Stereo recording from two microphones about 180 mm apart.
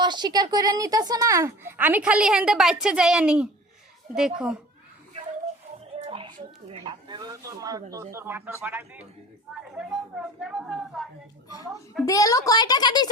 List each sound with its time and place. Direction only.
0.0 s a woman's voice: 25° right (ahead or behind); by 4.5 s 5° right (ahead or behind)
6.0 s a sound: 30° right (ahead or behind)
6.8 s a woman's voice: 20° right (ahead or behind); by 11.1 s centre (ahead or behind)
12.0 s a woman's voice: 20° left (ahead or behind)